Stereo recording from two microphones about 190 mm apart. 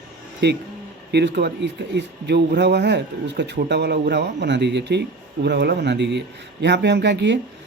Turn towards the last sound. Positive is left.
turn(degrees=-65)  # may be behind; listen again after turning